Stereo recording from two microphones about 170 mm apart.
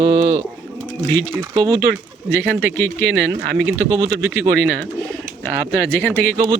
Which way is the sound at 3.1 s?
80° right.